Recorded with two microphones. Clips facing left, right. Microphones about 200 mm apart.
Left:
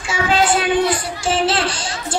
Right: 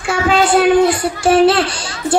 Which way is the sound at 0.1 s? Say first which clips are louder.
Right 4 dB; 60° right (ahead or behind).